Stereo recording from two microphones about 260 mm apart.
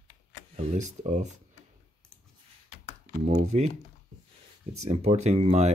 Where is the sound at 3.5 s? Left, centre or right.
Right.